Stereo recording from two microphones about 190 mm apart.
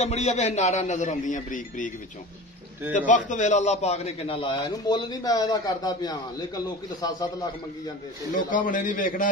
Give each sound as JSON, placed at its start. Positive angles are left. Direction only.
{"t": 0.0, "sound": "a man's voice", "side_deg": 35}
{"t": 3.1, "sound": "a man's voice", "side_deg": 40}
{"t": 8.4, "sound": "a man's voice", "side_deg": 45}